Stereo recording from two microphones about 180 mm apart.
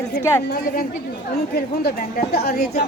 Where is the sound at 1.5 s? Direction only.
60° left (ahead or behind).